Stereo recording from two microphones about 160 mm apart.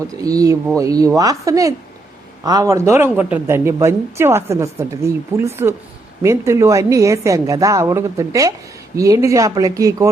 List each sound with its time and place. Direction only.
0.2 s a woman's voice: 20° right (ahead or behind)